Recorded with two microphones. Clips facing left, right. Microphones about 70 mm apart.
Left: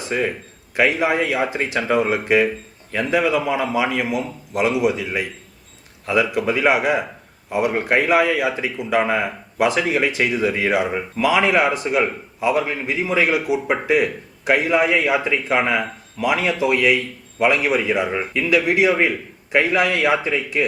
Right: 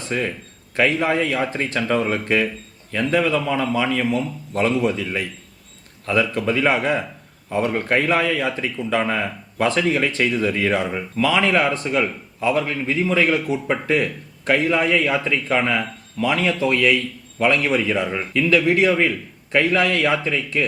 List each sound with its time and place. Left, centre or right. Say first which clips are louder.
0.0 s a man's voice: left 2 dB; centre